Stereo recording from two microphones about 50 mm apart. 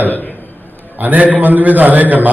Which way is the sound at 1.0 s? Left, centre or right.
Right.